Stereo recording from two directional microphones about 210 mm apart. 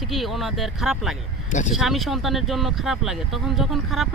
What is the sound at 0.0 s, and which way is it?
Speech, centre (ahead or behind).